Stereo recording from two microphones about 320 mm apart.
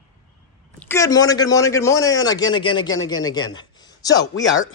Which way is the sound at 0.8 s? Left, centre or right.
Centre.